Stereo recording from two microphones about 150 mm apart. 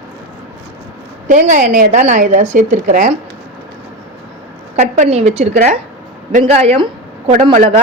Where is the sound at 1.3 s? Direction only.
60° right (ahead or behind).